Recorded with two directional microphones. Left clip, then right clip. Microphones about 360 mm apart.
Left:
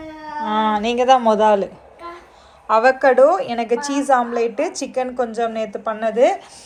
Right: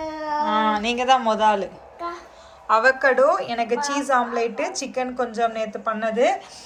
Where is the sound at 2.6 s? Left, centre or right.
Centre.